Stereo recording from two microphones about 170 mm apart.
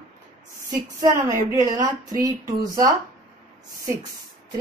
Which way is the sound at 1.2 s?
20° right (ahead or behind).